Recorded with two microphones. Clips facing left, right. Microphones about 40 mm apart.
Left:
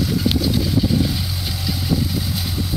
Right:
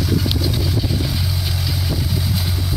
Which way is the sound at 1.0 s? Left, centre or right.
Centre.